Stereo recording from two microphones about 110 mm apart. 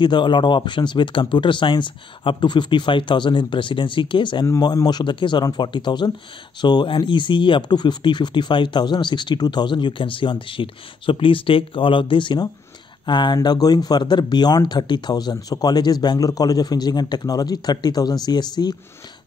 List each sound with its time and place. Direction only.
0.0 s speech: 45° left (ahead or behind)
4.5 s speech: 35° left (ahead or behind)